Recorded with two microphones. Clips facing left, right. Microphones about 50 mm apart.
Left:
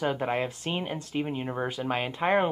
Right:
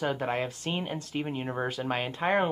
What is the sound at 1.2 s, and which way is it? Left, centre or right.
Speech, centre.